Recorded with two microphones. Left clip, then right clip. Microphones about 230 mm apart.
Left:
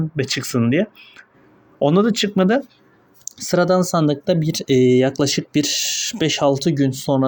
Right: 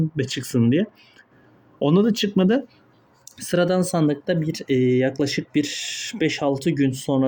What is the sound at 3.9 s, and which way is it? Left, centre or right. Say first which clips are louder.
Speech: left 4 dB; centre.